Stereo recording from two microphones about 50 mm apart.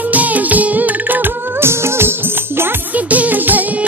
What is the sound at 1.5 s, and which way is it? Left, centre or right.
Music of bollywood, right.